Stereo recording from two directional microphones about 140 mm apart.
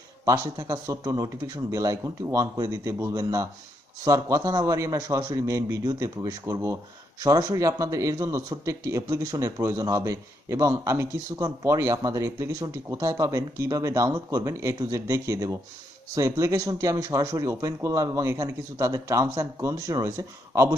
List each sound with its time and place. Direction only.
0.4 s speech: 25° right (ahead or behind)